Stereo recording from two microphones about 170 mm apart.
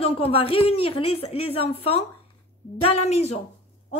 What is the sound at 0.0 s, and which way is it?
A woman's voice, 35° left (ahead or behind).